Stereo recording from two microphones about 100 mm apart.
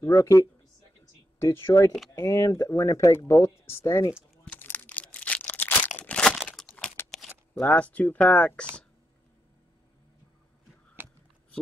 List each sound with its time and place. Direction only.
0.0 s speech: 35° left (ahead or behind)
1.4 s speech: 25° left (ahead or behind)
4.5 s crumpling: 20° left (ahead or behind)
7.0 s a sound: 20° left (ahead or behind)
7.6 s speech: 15° left (ahead or behind)